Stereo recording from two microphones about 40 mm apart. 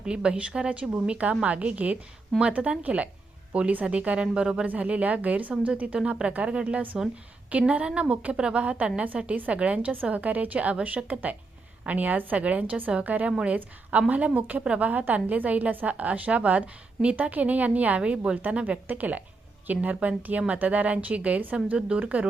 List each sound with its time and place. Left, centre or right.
0.0 s a woman's voice: right
4.6 s a woman's voice: right
6.0 s speech: right
7.5 s a woman's voice: right
7.9 s a woman's voice: right
12.4 s a woman's voice: right
21.8 s speech: right